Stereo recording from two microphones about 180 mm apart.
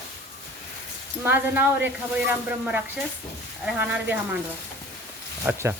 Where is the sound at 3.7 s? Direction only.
10° right (ahead or behind).